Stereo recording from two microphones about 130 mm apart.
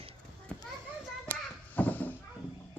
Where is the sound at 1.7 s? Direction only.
15° left (ahead or behind).